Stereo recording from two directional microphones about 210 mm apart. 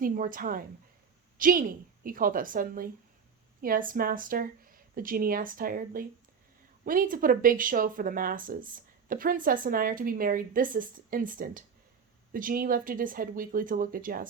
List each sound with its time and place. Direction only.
0.0 s a woman's voice: 40° right (ahead or behind)